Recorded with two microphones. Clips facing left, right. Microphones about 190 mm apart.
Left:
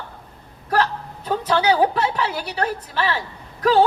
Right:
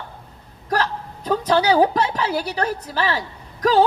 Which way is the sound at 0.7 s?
40° right (ahead or behind).